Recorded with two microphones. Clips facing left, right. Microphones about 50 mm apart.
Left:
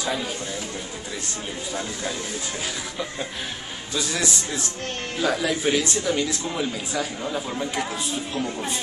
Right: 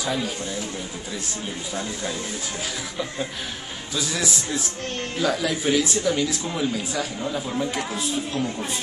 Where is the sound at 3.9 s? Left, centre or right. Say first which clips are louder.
Even; centre.